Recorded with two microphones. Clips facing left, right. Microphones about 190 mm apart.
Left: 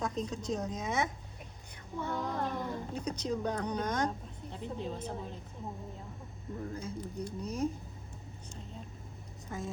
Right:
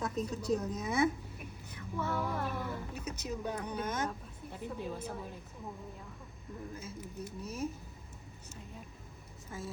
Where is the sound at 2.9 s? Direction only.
30° left (ahead or behind).